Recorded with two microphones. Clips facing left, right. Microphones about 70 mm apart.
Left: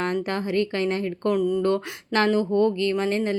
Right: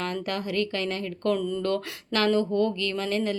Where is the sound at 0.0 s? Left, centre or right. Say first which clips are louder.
Left 4 dB; left.